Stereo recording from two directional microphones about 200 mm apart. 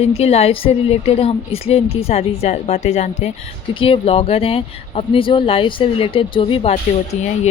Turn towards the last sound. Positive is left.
turn(degrees=30)  # may be behind; listen again after turning